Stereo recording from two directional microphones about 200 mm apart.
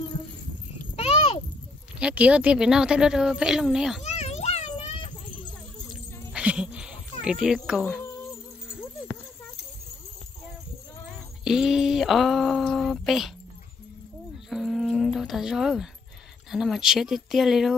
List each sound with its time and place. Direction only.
0.9 s a sound: 30° left (ahead or behind)
2.0 s speech: 5° right (ahead or behind)
4.0 s children playing: 35° left (ahead or behind)
5.9 s cat: 5° right (ahead or behind)
7.4 s speech: 5° right (ahead or behind)
11.4 s speech: centre (ahead or behind)
14.5 s music: centre (ahead or behind)
16.4 s speech: centre (ahead or behind)